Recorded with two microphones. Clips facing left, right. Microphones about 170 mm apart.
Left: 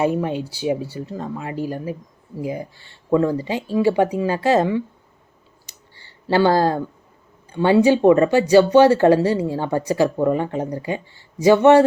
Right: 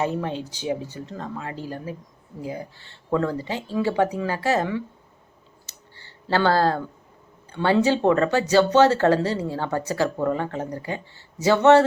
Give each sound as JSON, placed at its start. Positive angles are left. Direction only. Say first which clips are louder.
{"t": 0.0, "sound": "speech", "louder": "left 5 dB", "side_deg": 15}
{"t": 5.6, "sound": "clicking", "louder": "even", "side_deg": 15}
{"t": 7.5, "sound": "speech", "louder": "left 5 dB", "side_deg": 15}